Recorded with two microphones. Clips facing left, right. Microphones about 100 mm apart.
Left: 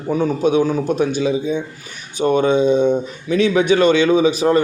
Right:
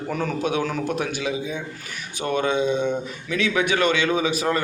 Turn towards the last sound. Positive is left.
turn(degrees=30)  # may be behind; listen again after turning